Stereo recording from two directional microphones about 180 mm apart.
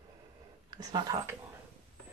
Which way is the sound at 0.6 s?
20° right (ahead or behind).